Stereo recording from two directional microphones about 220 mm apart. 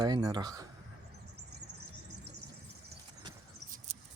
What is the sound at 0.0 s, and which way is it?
Speech, 20° right (ahead or behind).